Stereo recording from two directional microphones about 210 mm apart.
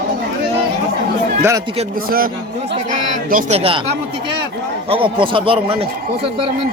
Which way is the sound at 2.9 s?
35° right (ahead or behind).